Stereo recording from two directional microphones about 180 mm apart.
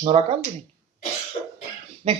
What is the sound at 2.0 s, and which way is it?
Speech, 30° right (ahead or behind).